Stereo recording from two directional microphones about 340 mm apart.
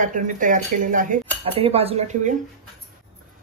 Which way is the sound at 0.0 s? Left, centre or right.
Right.